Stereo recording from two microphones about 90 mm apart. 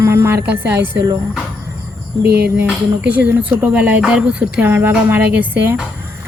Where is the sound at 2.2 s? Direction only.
20° right (ahead or behind).